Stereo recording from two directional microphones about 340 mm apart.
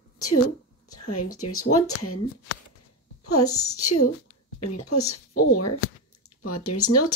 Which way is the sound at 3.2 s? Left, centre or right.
Left.